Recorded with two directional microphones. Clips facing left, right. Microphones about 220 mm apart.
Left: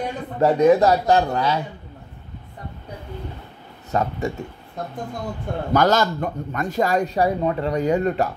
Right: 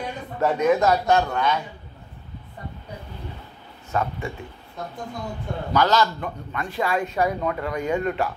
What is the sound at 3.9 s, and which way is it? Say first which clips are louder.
Speech: left 3 dB; 40° left (ahead or behind).